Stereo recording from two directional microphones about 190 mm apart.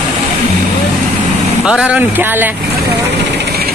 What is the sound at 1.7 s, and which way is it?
Speech, 5° right (ahead or behind).